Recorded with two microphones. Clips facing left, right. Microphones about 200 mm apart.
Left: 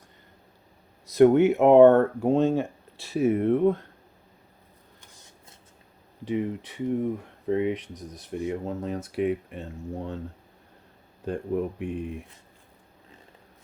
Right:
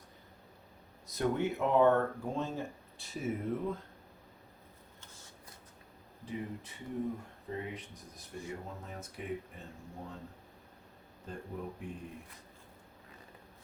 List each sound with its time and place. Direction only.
1.0 s speech: 75° left (ahead or behind)
6.2 s speech: 90° left
11.3 s speech: 80° left